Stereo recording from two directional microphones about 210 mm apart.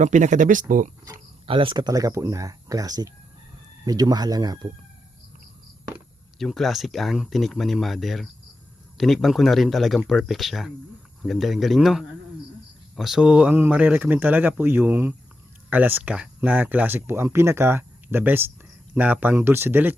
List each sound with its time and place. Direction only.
0.0 s speech: 35° right (ahead or behind)
1.0 s speech: 25° right (ahead or behind)
6.4 s speech: centre (ahead or behind)